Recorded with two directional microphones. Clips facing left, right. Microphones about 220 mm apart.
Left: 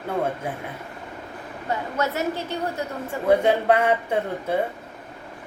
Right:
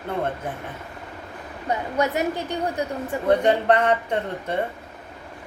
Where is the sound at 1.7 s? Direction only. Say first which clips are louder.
Right 2 dB; 15° right (ahead or behind).